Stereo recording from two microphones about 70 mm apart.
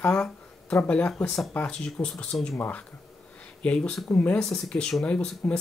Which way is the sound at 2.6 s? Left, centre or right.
Left.